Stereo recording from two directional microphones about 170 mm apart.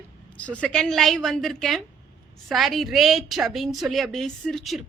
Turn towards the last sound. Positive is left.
turn(degrees=0)  # may be behind; listen again after turning